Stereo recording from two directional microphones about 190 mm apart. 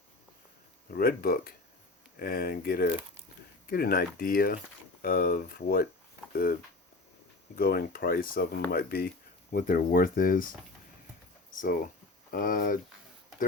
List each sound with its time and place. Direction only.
0.9 s speech: 50° left (ahead or behind)
11.5 s speech: 45° left (ahead or behind)